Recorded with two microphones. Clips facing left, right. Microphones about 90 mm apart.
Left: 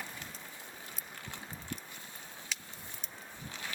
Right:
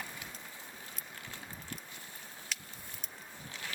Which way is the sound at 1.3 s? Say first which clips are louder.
Left 3 dB; 20° left (ahead or behind).